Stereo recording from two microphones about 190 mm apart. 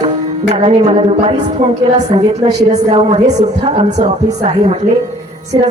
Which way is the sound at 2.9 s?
35° right (ahead or behind).